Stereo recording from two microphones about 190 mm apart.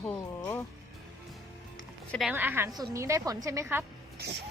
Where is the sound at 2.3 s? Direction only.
10° right (ahead or behind).